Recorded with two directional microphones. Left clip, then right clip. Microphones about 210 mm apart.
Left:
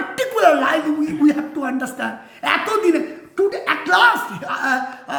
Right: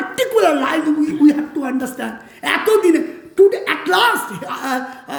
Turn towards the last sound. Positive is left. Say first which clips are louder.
# left 2 dB
turn(degrees=15)  # may be behind; listen again after turning